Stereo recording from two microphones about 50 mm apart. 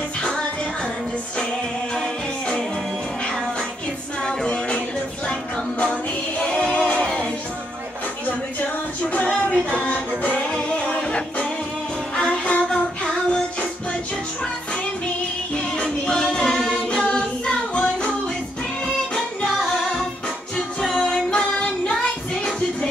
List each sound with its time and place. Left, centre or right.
2.0 s music: centre
4.5 s music: left
9.0 s music: left
15.5 s music: left
16.2 s a capella: centre
19.1 s music: centre
21.0 s singing: centre
22.0 s music: left